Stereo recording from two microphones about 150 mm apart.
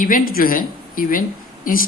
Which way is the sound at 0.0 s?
70° left (ahead or behind).